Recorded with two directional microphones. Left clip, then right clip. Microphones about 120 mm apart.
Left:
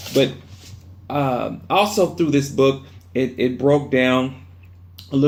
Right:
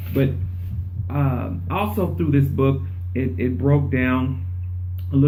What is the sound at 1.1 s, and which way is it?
Speech, 30° left (ahead or behind).